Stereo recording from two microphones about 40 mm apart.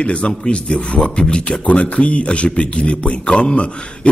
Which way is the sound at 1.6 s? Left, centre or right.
Left.